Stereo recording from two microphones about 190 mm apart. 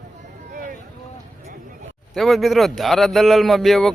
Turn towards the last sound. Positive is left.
turn(degrees=0)  # may be behind; listen again after turning